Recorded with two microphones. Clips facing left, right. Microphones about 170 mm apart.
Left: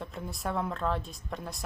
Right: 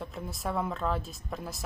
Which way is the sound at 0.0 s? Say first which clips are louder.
Even; centre (ahead or behind).